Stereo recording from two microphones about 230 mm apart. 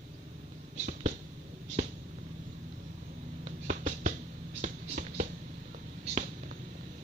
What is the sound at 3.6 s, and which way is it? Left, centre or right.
Music, right.